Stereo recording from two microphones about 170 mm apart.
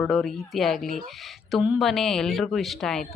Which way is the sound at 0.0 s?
Centre (ahead or behind).